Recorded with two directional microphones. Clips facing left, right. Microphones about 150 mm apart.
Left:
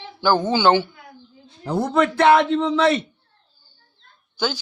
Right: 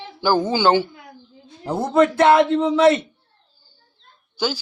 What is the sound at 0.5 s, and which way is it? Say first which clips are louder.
Speech: left 1 dB; 40° right (ahead or behind).